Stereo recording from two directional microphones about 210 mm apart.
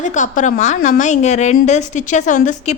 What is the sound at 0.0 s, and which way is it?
A woman's voice, 35° left (ahead or behind).